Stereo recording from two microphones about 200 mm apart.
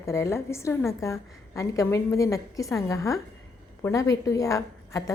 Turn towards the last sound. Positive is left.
turn(degrees=15)  # may be behind; listen again after turning